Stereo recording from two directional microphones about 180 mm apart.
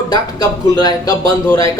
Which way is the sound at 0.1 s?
20° left (ahead or behind).